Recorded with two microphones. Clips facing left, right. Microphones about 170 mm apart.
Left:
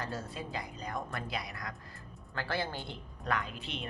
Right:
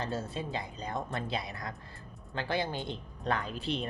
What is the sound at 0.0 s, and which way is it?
Speech, 25° right (ahead or behind).